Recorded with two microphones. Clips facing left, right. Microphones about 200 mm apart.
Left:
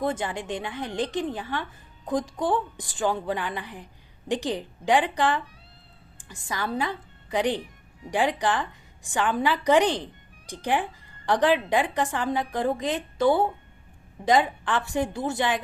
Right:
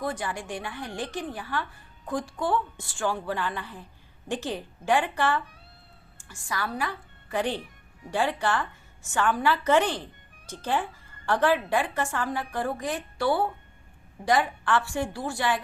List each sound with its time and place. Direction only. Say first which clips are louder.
0.0 s a woman's voice: left 4 dB; 25° left (ahead or behind)